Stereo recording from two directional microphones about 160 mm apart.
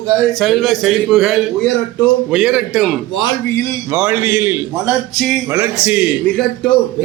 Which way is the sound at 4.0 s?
10° right (ahead or behind).